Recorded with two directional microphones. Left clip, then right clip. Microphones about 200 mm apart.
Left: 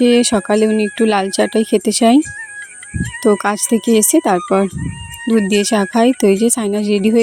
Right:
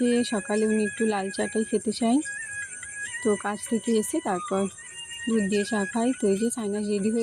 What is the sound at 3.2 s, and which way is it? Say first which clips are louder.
Speech: left 13 dB; 55° left (ahead or behind).